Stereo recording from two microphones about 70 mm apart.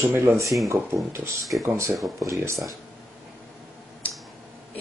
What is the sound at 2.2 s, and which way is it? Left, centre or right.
Speech, right.